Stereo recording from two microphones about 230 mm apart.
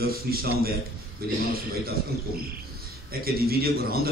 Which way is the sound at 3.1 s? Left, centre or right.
Right.